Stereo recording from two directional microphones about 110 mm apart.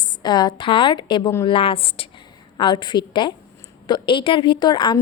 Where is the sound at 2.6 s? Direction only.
45° left (ahead or behind).